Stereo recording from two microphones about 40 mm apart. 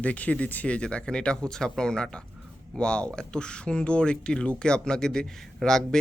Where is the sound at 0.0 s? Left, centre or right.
Left.